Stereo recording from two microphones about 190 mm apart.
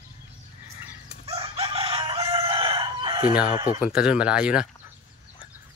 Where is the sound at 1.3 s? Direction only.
30° right (ahead or behind).